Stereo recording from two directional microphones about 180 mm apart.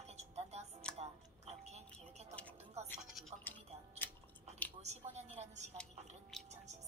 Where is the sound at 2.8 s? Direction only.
35° right (ahead or behind).